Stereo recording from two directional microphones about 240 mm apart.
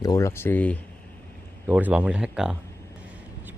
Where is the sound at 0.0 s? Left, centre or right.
Centre.